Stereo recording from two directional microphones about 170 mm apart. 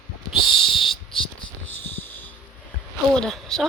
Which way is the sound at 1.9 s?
10° left (ahead or behind).